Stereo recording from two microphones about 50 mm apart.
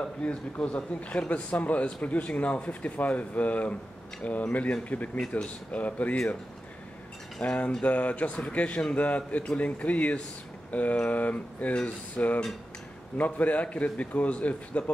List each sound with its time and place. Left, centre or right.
0.0 s speech: left
7.4 s speech: left
12.2 s speech: centre
13.2 s speech: left